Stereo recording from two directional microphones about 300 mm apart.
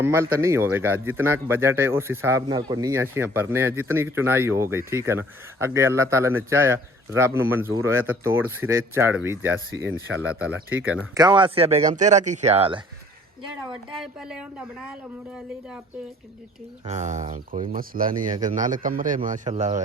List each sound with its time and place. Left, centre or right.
0.0 s a man's voice: centre
9.7 s speech: right
10.2 s speech: centre
14.0 s speech: centre
16.8 s speech: right